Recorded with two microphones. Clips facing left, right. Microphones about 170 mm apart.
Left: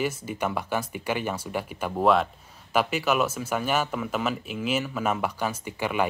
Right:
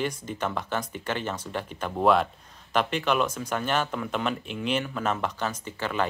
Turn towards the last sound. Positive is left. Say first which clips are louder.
# left 2 dB
turn(degrees=10)  # may be behind; listen again after turning